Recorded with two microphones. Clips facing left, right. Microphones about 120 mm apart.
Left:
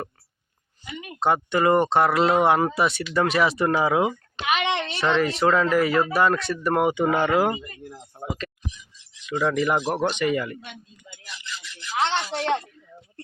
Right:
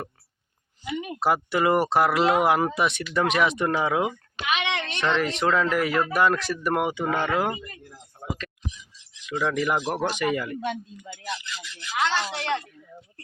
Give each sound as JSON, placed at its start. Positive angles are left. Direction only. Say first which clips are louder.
{"t": 0.9, "sound": "speech", "louder": "left 1 dB", "side_deg": -5}
{"t": 4.4, "sound": "a woman's voice", "louder": "left 3 dB", "side_deg": 35}
{"t": 4.9, "sound": "speech", "louder": "left 2 dB", "side_deg": 5}
{"t": 6.8, "sound": "speech", "louder": "left 4 dB", "side_deg": 15}
{"t": 7.9, "sound": "a sound", "louder": "left 6 dB", "side_deg": 20}
{"t": 9.2, "sound": "speech", "louder": "left 2 dB", "side_deg": 0}
{"t": 11.9, "sound": "a woman's voice", "louder": "left 1 dB", "side_deg": 30}